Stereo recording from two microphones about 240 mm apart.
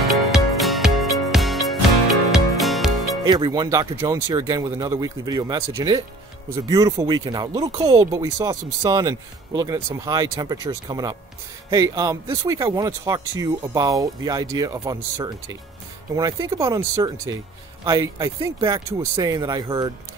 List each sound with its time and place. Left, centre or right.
0.3 s music: centre
3.3 s speech: centre